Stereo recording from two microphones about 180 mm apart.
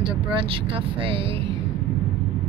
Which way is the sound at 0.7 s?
30° right (ahead or behind).